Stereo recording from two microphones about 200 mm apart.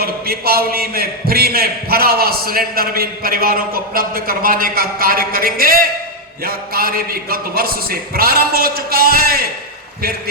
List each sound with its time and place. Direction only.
0.0 s a man's voice: 50° right (ahead or behind)